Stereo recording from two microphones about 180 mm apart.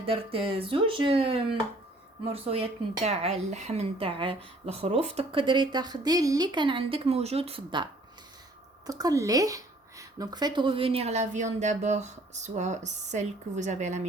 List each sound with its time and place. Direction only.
0.0 s speech: 30° right (ahead or behind)
8.9 s speech: 20° right (ahead or behind); by 14.1 s 40° right (ahead or behind)